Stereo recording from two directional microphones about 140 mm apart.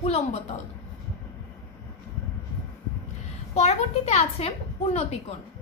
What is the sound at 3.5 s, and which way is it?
Speech, 50° left (ahead or behind).